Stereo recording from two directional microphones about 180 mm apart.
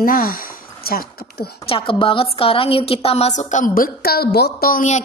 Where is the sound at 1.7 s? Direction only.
30° left (ahead or behind).